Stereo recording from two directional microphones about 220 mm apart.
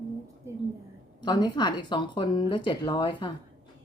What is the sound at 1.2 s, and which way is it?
Speech, 20° left (ahead or behind).